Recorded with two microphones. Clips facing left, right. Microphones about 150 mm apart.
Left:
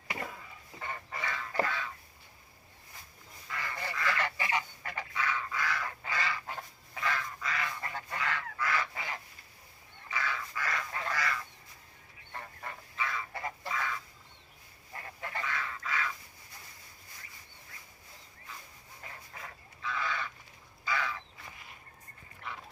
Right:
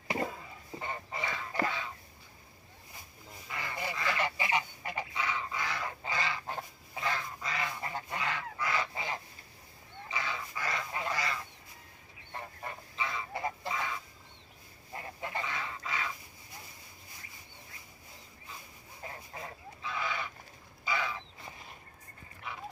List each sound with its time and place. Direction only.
0.8 s goose: 20° right (ahead or behind)
1.6 s a sound: 20° right (ahead or behind)
3.5 s goose: 20° right (ahead or behind)
19.0 s goat: 30° right (ahead or behind)
20.8 s goose: 20° right (ahead or behind)